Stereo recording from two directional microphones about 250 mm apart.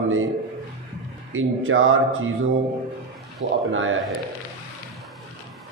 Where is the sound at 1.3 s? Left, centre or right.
Right.